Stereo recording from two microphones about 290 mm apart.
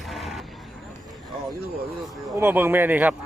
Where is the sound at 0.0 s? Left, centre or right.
Centre.